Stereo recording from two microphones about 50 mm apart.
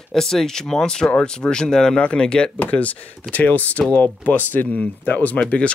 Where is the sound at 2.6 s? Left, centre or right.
Left.